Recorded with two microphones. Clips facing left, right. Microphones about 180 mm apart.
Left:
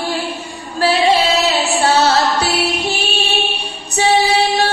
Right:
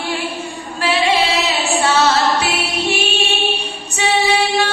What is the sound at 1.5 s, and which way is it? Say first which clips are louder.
Music: left 2 dB; 35° left (ahead or behind).